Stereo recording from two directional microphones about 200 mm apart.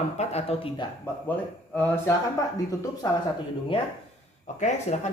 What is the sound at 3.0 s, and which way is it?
Speech, 20° left (ahead or behind).